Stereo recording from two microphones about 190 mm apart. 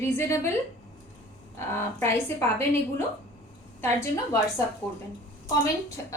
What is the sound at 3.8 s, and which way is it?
Speech, 15° left (ahead or behind).